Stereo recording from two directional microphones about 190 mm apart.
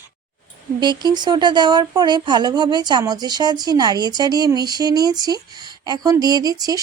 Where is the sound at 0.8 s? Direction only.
25° right (ahead or behind).